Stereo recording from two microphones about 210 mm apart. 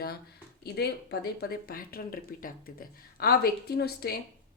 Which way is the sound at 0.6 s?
50° left (ahead or behind).